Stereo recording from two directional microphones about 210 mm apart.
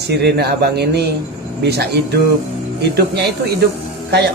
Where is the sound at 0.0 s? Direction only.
50° right (ahead or behind).